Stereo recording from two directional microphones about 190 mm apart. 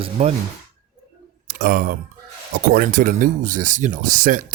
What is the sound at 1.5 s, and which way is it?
Speech, 50° right (ahead or behind).